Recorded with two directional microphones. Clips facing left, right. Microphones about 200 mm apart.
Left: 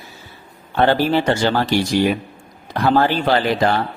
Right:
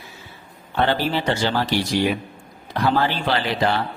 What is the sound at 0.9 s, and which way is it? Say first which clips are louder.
Speech: left 7 dB; 45° left (ahead or behind).